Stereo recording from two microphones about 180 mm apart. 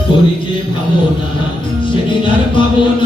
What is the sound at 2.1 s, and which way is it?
Music, 25° left (ahead or behind).